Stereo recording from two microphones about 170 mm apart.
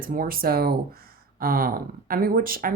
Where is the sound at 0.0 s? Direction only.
55° right (ahead or behind).